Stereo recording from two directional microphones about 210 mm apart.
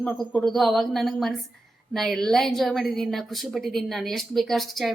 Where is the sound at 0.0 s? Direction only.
Centre (ahead or behind).